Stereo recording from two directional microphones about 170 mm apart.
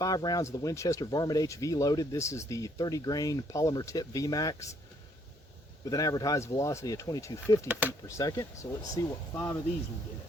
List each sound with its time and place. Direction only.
0.0 s speech: 20° left (ahead or behind)
5.8 s speech: 20° left (ahead or behind)
7.7 s speech: 10° right (ahead or behind)
8.0 s speech: 20° left (ahead or behind)